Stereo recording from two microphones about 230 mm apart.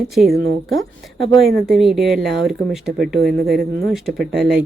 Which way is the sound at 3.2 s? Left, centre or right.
Right.